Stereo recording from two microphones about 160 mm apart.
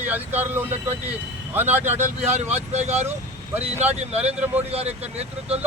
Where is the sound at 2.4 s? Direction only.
45° right (ahead or behind).